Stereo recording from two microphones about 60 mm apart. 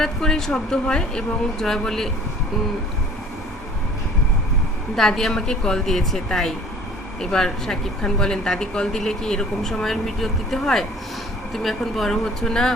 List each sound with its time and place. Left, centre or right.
0.0 s speech: centre
4.9 s speech: centre